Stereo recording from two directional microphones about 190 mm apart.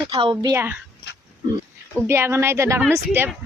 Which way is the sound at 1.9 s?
10° right (ahead or behind).